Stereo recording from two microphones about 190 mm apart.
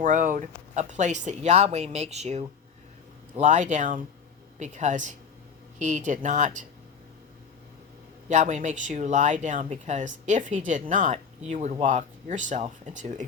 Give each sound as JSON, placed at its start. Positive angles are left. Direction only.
{"t": 0.0, "sound": "speech", "side_deg": -45}
{"t": 8.3, "sound": "speech", "side_deg": -40}